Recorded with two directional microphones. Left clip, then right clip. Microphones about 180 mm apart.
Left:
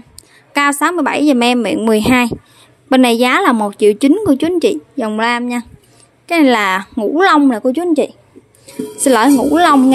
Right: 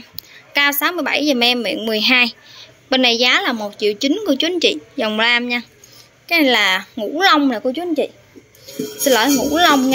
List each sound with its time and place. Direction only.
0.6 s a woman's voice: 45° left (ahead or behind)
4.1 s a woman's voice: 40° left (ahead or behind)
6.2 s a woman's voice: 45° left (ahead or behind)